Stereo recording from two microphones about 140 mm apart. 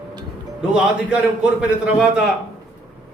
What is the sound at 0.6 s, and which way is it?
Speech, 5° right (ahead or behind).